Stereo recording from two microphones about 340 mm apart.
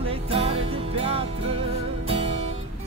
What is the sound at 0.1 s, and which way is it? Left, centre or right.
Music, centre.